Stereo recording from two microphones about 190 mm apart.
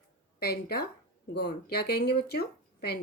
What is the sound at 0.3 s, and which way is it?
Speech, 55° left (ahead or behind).